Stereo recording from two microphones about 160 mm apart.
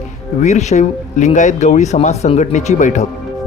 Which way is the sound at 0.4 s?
45° left (ahead or behind).